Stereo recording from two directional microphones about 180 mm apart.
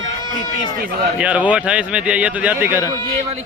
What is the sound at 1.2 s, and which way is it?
A man's voice, 10° right (ahead or behind).